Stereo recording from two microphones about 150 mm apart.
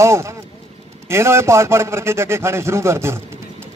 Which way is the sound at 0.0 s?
20° right (ahead or behind).